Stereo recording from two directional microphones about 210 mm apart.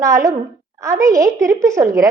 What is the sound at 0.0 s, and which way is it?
A woman's voice, 15° right (ahead or behind).